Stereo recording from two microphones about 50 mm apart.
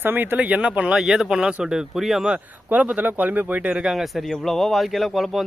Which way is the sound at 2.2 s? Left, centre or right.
Right.